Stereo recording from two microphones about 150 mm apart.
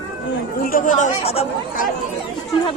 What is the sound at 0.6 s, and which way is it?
Speech, 65° left (ahead or behind).